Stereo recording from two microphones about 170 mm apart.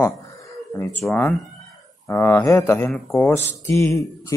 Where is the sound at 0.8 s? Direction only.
15° left (ahead or behind).